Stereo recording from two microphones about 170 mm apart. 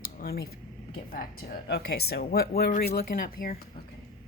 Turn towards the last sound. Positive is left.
turn(degrees=55)  # may be behind; listen again after turning